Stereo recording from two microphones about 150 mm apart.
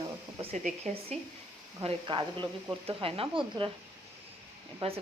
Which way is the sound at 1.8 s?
35° right (ahead or behind).